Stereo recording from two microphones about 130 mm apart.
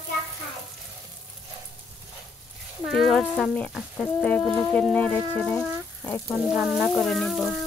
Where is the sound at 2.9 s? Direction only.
Centre (ahead or behind).